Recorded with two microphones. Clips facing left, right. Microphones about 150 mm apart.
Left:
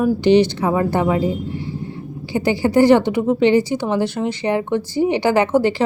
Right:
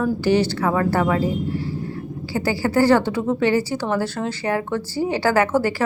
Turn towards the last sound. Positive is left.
turn(degrees=20)  # may be behind; listen again after turning